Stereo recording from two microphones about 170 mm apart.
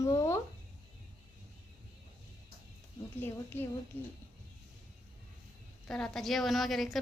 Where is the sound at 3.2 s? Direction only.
10° left (ahead or behind).